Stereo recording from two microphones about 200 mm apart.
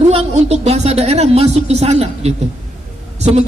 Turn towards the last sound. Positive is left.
turn(degrees=-35)  # may be behind; listen again after turning